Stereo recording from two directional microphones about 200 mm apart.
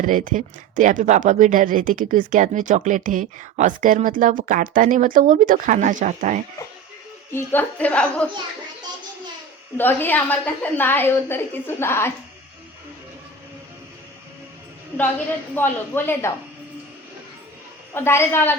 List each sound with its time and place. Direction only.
0.0 s speech: 40° right (ahead or behind)
7.3 s a woman's voice: 10° left (ahead or behind)
9.7 s a woman's voice: 10° left (ahead or behind)
15.5 s a woman's voice: 10° left (ahead or behind)
17.9 s a woman's voice: 10° left (ahead or behind)